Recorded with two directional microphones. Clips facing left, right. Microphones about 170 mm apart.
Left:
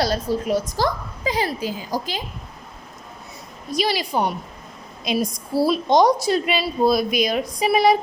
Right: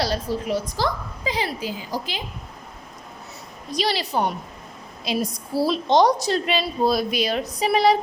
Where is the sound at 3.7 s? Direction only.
10° left (ahead or behind).